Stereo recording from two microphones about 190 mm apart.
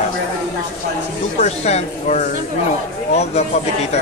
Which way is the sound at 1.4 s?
35° left (ahead or behind).